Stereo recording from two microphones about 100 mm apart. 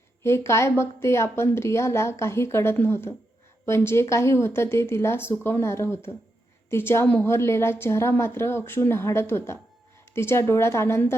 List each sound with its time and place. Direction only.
0.2 s a woman's voice: 25° left (ahead or behind)